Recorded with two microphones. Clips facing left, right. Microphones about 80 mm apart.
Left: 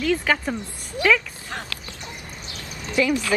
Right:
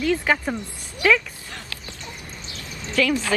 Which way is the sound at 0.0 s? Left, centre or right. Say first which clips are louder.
Even; centre.